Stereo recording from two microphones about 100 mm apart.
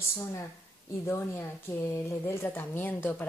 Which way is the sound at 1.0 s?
30° left (ahead or behind).